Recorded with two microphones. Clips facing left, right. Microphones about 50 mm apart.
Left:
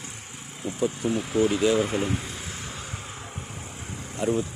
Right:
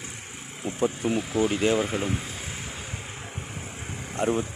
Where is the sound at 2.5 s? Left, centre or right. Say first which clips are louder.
Even; centre.